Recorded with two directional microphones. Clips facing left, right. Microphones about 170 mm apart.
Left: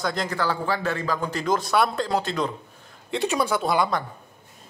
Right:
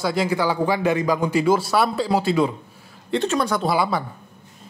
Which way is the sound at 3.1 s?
10° left (ahead or behind).